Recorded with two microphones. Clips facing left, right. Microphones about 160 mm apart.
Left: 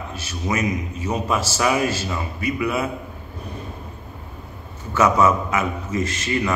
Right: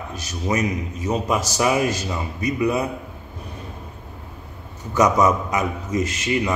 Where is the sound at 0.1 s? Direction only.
15° right (ahead or behind).